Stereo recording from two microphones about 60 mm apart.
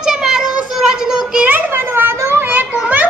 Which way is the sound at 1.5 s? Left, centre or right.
Right.